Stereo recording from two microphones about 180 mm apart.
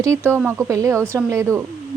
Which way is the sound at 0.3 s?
10° right (ahead or behind).